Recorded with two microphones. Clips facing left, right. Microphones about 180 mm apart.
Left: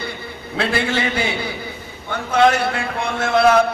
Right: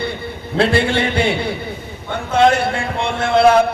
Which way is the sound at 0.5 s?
30° right (ahead or behind).